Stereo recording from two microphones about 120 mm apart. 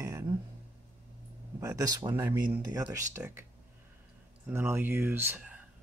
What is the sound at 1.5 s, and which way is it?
Speech, 30° right (ahead or behind).